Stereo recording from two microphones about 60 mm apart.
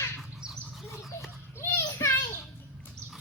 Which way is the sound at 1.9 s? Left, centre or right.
Left.